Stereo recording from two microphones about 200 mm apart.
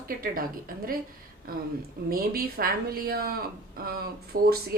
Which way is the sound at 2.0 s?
50° right (ahead or behind).